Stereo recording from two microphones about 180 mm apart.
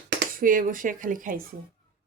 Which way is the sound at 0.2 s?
50° right (ahead or behind).